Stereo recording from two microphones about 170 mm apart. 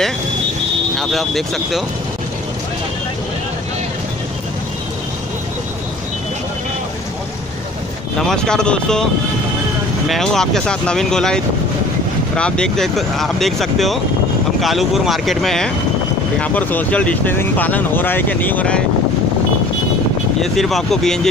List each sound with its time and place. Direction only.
0.9 s speech: centre (ahead or behind)
8.2 s speech: 5° left (ahead or behind)
10.0 s speech: centre (ahead or behind)
20.5 s speech: centre (ahead or behind)